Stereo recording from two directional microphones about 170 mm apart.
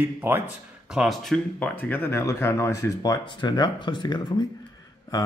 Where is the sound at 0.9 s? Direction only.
Centre (ahead or behind).